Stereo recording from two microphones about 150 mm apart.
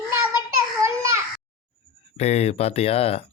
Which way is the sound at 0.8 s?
20° right (ahead or behind).